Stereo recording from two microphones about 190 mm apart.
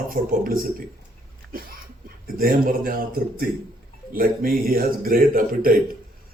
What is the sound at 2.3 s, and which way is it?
Speech, 50° right (ahead or behind).